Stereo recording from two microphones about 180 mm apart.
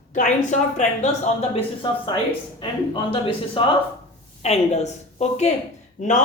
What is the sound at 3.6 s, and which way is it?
A woman's voice, 30° left (ahead or behind).